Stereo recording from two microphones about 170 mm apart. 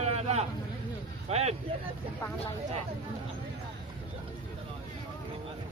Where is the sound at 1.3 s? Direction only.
40° right (ahead or behind).